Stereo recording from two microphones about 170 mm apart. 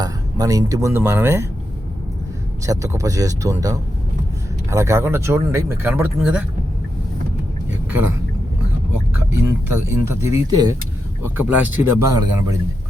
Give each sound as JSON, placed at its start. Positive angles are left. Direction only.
{"t": 0.0, "sound": "speech", "side_deg": -20}
{"t": 2.6, "sound": "speech", "side_deg": -20}
{"t": 7.7, "sound": "a sound", "side_deg": -10}
{"t": 9.8, "sound": "speech", "side_deg": -15}